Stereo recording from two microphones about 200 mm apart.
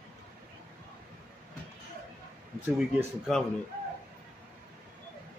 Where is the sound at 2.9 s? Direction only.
Centre (ahead or behind).